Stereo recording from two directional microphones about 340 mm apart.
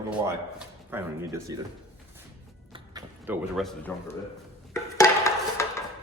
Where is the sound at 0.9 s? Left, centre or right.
Centre.